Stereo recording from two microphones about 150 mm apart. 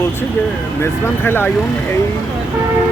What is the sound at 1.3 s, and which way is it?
Speech, 15° left (ahead or behind).